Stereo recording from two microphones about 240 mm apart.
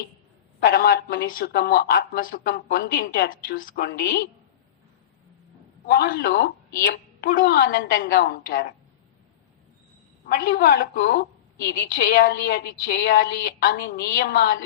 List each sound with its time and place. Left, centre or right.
0.6 s a woman's voice: left
5.8 s a woman's voice: left
10.2 s a woman's voice: left